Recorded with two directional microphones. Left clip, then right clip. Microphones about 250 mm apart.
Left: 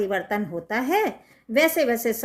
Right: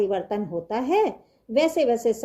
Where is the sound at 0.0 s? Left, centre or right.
Centre.